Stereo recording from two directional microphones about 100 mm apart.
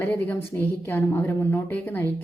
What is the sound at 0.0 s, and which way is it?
A woman's voice, 20° left (ahead or behind).